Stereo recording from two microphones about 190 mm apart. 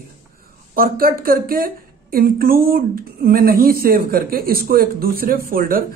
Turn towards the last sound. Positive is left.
turn(degrees=-50)  # may be behind; listen again after turning